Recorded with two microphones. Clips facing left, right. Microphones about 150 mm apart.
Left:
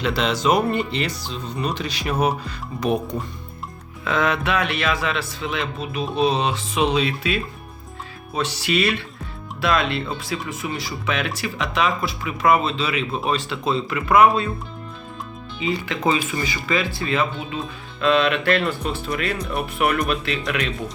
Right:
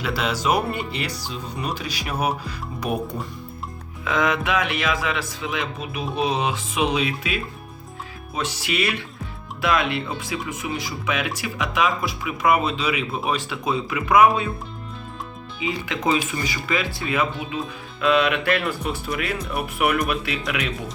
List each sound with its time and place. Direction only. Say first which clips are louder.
0.0 s speech: left 3 dB; 5° right (ahead or behind)
8.4 s speech: left 3 dB; 15° right (ahead or behind)
16.4 s speech: left 2 dB; 10° right (ahead or behind)